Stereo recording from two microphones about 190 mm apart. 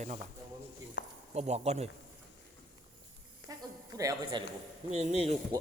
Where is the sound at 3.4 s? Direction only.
60° left (ahead or behind).